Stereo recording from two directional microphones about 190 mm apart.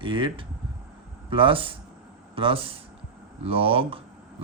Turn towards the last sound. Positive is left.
turn(degrees=-30)  # may be behind; listen again after turning